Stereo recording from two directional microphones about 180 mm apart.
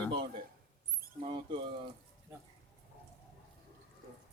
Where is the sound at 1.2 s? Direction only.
25° right (ahead or behind).